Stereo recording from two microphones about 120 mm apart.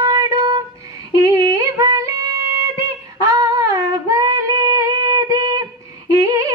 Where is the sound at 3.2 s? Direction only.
25° right (ahead or behind).